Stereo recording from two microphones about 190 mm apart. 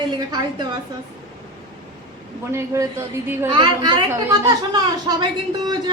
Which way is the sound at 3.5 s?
25° right (ahead or behind).